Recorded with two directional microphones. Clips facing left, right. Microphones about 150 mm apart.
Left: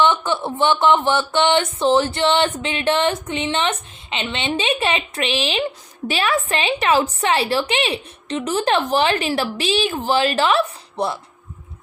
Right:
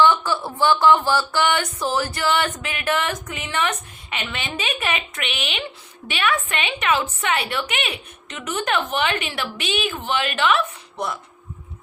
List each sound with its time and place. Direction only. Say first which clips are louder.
0.0 s a woman's voice: even; 20° left (ahead or behind)